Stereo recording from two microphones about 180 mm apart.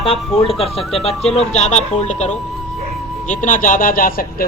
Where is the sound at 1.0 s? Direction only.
35° left (ahead or behind); by 4.5 s 55° left (ahead or behind).